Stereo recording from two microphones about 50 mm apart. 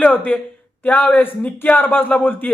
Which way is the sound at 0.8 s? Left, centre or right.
Left.